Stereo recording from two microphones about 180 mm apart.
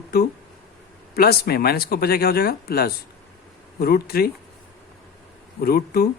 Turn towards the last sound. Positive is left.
turn(degrees=60)  # may be behind; listen again after turning